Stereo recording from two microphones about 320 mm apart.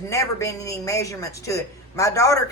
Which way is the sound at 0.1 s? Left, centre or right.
Centre.